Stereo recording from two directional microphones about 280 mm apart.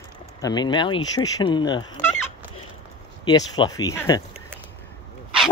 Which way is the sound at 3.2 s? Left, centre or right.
Centre.